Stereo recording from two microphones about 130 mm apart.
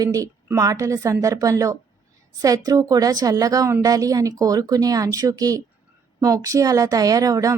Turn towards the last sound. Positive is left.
turn(degrees=-25)  # may be behind; listen again after turning